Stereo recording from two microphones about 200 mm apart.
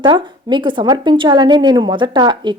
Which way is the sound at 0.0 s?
25° right (ahead or behind).